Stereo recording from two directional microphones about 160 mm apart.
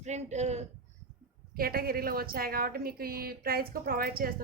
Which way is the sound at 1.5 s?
70° right (ahead or behind).